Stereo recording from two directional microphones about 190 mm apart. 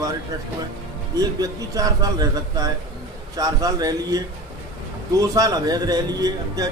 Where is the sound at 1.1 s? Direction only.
20° right (ahead or behind).